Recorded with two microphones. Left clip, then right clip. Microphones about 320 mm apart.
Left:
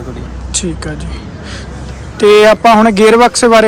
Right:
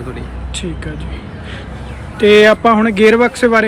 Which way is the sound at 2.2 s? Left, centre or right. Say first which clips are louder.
Left 2 dB; centre.